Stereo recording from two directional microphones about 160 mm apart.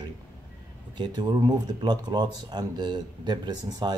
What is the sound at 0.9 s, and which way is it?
Speech, 25° right (ahead or behind).